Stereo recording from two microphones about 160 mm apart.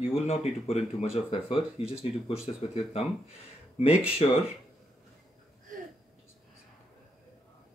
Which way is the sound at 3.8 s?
35° left (ahead or behind).